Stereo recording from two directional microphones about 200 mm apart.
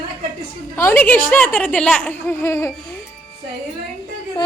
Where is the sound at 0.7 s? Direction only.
10° left (ahead or behind).